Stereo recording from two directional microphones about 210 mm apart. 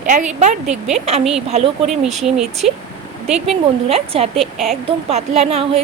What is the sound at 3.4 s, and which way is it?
Speech, 30° right (ahead or behind).